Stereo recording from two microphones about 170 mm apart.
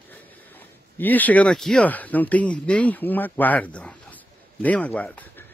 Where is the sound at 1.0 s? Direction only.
10° left (ahead or behind).